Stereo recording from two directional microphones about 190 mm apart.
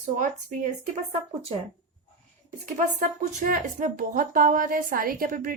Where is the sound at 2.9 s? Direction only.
40° right (ahead or behind).